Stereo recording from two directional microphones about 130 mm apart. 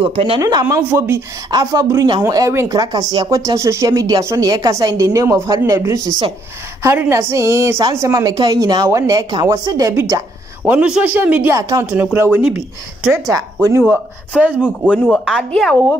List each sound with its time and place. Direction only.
0.0 s speech: 45° right (ahead or behind)
0.4 s speech: 30° right (ahead or behind)
0.7 s speech: 20° right (ahead or behind)
1.5 s speech: 30° right (ahead or behind)
10.6 s speech: 10° right (ahead or behind)
13.3 s speech: 25° right (ahead or behind); by 14.7 s 10° right (ahead or behind)
15.0 s a woman's voice: centre (ahead or behind)